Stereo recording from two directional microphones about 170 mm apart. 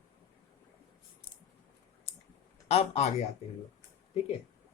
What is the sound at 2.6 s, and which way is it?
Speech, 40° left (ahead or behind).